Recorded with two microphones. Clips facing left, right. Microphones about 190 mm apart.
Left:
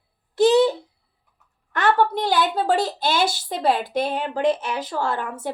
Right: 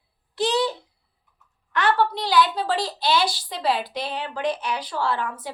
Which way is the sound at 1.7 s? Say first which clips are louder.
Left 2 dB; 45° left (ahead or behind).